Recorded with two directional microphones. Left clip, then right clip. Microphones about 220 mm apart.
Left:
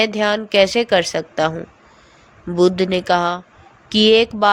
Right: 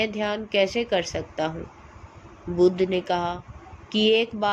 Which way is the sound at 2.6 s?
55° left (ahead or behind).